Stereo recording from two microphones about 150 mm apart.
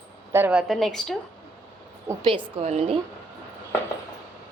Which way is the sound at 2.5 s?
45° right (ahead or behind).